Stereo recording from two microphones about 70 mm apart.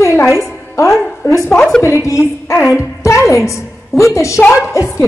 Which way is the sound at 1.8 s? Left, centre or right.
Left.